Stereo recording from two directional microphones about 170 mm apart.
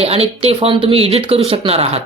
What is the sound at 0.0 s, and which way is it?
Speech, 35° right (ahead or behind).